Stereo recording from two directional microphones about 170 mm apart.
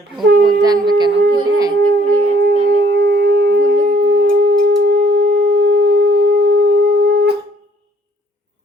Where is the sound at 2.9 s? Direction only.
85° right.